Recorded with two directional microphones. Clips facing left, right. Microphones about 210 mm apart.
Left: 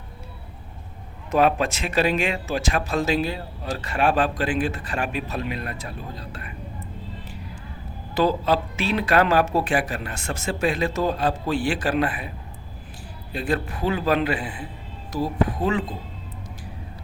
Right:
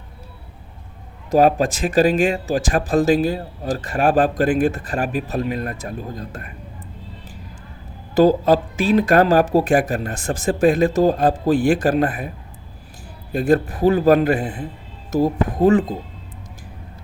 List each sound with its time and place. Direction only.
1.4 s speech: 40° right (ahead or behind)
8.1 s speech: 45° right (ahead or behind)
13.3 s speech: 40° right (ahead or behind)